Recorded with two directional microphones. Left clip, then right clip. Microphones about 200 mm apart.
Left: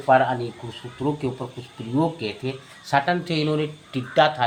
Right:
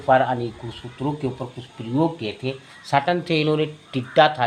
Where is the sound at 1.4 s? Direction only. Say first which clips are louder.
Right 1 dB; 15° right (ahead or behind).